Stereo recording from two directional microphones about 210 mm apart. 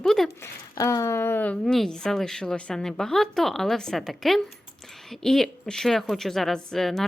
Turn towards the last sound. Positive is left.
turn(degrees=0)  # may be behind; listen again after turning